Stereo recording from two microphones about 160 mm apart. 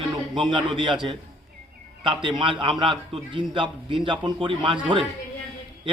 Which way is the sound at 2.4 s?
30° right (ahead or behind).